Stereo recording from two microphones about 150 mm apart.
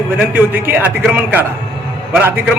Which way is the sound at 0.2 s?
15° right (ahead or behind).